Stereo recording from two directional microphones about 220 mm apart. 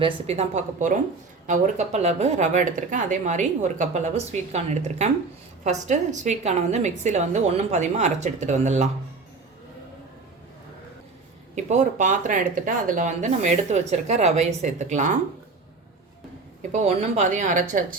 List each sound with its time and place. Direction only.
0.0 s speech: 30° right (ahead or behind)
11.5 s speech: 30° right (ahead or behind)
16.7 s speech: 35° right (ahead or behind)